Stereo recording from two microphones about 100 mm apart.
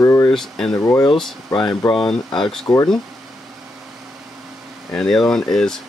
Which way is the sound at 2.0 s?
5° left (ahead or behind).